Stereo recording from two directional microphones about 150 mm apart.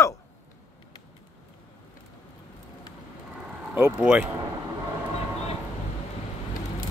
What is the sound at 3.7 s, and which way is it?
Speech, 5° right (ahead or behind).